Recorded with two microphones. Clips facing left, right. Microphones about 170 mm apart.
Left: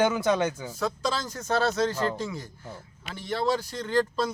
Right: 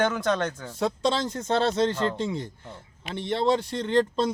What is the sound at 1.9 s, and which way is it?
Speech, 5° left (ahead or behind).